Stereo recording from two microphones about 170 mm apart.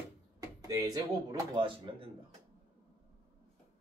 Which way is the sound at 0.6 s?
20° right (ahead or behind).